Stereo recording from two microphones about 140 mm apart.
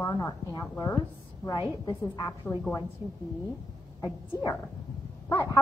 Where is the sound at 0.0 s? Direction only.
30° left (ahead or behind).